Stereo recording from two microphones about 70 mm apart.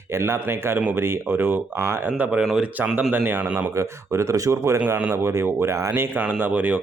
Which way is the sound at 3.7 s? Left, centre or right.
Right.